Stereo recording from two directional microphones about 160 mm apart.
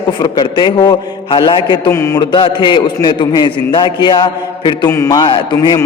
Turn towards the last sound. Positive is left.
turn(degrees=30)  # may be behind; listen again after turning